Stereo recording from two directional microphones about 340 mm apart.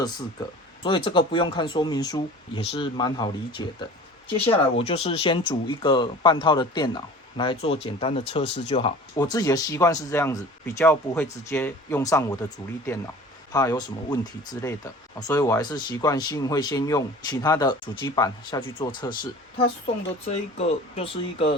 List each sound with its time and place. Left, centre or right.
0.0 s speech: centre
13.5 s speech: centre